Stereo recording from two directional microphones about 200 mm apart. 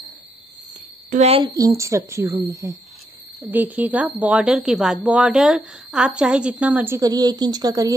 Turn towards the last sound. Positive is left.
turn(degrees=-20)  # may be behind; listen again after turning